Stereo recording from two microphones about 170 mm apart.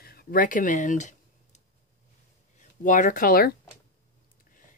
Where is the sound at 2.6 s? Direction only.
50° left (ahead or behind).